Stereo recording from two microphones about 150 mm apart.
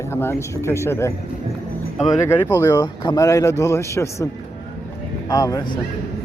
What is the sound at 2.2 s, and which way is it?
Speech, 15° left (ahead or behind).